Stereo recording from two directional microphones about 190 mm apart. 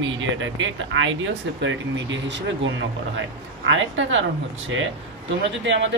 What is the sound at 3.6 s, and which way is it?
Speech, 85° right.